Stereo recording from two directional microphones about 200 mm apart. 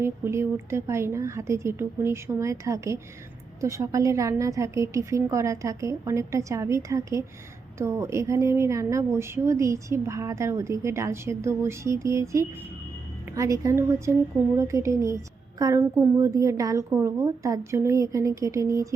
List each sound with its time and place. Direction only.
0.0 s a woman's voice: 10° right (ahead or behind)